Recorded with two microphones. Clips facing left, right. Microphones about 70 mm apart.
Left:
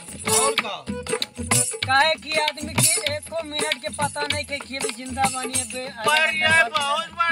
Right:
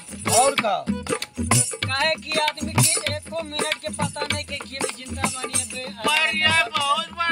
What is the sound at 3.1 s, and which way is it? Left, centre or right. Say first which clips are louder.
Music: left 1 dB; left.